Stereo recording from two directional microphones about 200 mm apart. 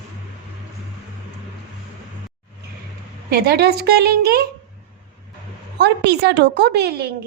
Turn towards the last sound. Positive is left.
turn(degrees=-55)  # may be behind; listen again after turning